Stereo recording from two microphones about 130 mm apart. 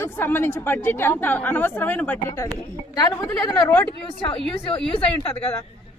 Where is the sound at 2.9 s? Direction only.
30° left (ahead or behind).